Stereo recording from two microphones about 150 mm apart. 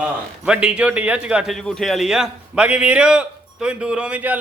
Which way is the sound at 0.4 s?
5° right (ahead or behind).